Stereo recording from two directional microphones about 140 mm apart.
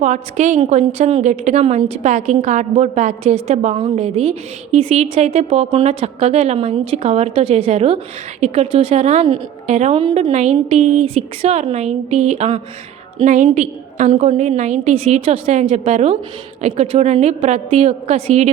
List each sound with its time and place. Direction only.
0.0 s a woman's voice: 60° right (ahead or behind); by 9.0 s 40° right (ahead or behind)
9.0 s a woman's voice: 55° right (ahead or behind)
10.0 s speech: 40° right (ahead or behind)
10.3 s a woman's voice: 55° right (ahead or behind)
13.2 s a woman's voice: 60° right (ahead or behind)